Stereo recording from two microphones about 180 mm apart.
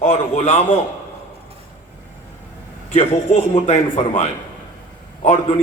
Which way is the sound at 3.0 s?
35° left (ahead or behind).